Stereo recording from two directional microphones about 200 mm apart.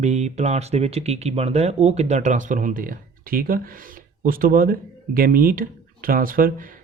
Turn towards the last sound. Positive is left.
turn(degrees=-45)  # may be behind; listen again after turning